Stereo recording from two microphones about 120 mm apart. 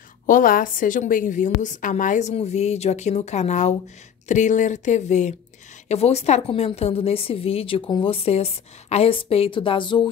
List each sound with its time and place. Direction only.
0.3 s a woman's voice: 90° left; by 3.7 s 75° left (ahead or behind)
4.3 s speech: 90° left
5.9 s a woman's voice: 60° left (ahead or behind); by 10.0 s 40° left (ahead or behind)